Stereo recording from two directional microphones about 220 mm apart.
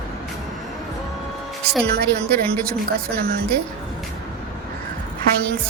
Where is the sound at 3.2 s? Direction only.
45° right (ahead or behind).